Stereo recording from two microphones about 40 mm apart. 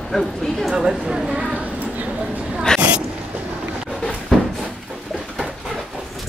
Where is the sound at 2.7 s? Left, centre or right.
Right.